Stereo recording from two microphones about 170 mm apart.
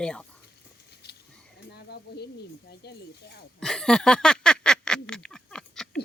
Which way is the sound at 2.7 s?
75° left (ahead or behind).